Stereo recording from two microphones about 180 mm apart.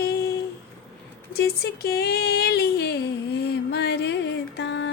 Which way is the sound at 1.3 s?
60° left (ahead or behind).